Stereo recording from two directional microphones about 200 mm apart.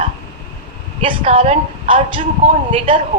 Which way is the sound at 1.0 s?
30° right (ahead or behind).